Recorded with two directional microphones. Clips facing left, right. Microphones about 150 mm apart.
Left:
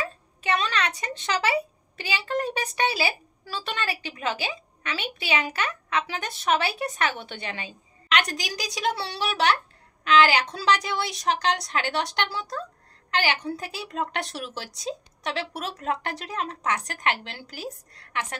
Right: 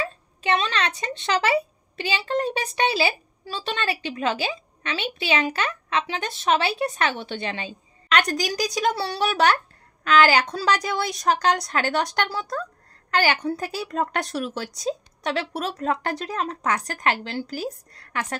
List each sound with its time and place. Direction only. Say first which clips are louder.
0.4 s a child's voice: right 2 dB; 25° right (ahead or behind)
8.1 s a woman's voice: right 4 dB; 40° right (ahead or behind)